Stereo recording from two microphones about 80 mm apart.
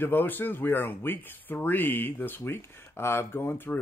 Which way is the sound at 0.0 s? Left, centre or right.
Left.